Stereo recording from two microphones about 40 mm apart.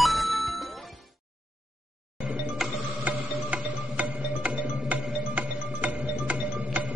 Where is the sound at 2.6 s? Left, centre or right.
Centre.